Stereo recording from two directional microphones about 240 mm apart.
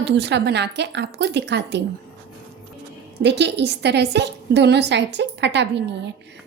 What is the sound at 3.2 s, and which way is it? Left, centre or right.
A woman's voice, right.